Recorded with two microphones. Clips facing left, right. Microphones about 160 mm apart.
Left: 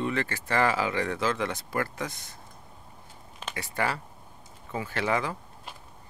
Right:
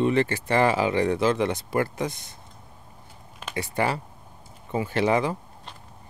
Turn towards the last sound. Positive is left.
turn(degrees=-25)  # may be behind; listen again after turning